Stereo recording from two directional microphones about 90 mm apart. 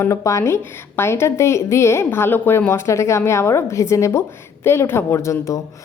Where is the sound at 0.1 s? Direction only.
35° left (ahead or behind).